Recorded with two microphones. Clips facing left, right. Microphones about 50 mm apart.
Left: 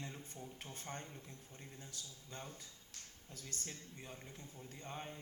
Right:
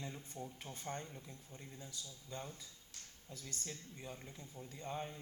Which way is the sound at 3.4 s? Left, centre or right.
Centre.